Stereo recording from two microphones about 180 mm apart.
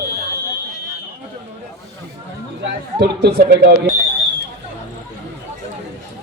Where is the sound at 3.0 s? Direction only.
65° right (ahead or behind).